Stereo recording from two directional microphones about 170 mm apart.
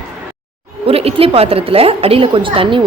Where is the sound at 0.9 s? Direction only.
35° right (ahead or behind).